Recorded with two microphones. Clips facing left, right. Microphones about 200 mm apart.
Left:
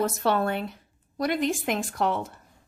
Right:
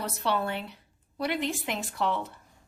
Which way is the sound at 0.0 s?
45° left (ahead or behind).